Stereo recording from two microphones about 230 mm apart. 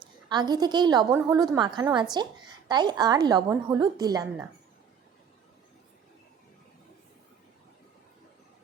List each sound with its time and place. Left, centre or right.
0.3 s a woman's voice: centre